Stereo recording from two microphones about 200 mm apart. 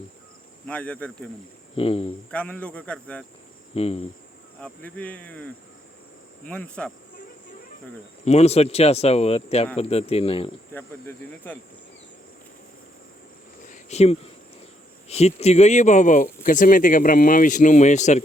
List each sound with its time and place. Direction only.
0.7 s a man's voice: 5° left (ahead or behind)
1.7 s speech: 30° left (ahead or behind)
2.3 s a man's voice: 5° left (ahead or behind)
3.8 s speech: 30° left (ahead or behind)
4.6 s a man's voice: 10° left (ahead or behind)
8.2 s speech: 35° left (ahead or behind)
10.8 s a man's voice: 10° left (ahead or behind)
13.7 s a sound: 35° left (ahead or behind)
15.1 s speech: 35° left (ahead or behind)